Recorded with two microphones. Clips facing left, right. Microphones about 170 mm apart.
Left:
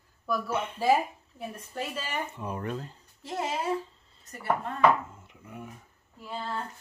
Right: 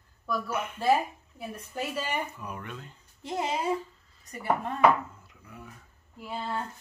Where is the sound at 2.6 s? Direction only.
35° left (ahead or behind).